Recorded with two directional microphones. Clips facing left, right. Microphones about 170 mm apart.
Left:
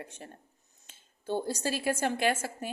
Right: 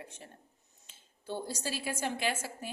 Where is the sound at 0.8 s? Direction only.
50° left (ahead or behind).